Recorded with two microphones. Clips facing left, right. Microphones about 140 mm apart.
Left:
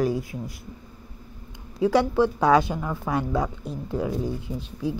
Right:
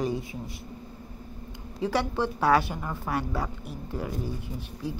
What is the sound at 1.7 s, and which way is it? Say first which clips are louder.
Speech: left 7 dB; 10° left (ahead or behind).